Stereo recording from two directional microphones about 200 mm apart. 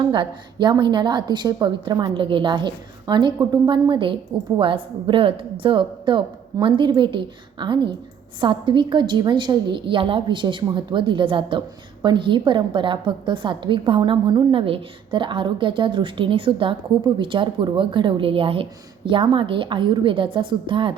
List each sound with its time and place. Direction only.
0.0 s a woman's voice: 25° right (ahead or behind)